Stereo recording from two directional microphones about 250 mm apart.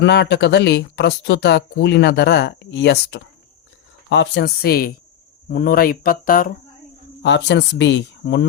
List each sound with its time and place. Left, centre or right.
0.0 s speech: left
7.2 s speech: left